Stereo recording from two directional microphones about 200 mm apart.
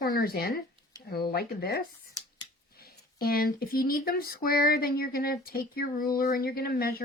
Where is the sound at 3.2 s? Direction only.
50° left (ahead or behind).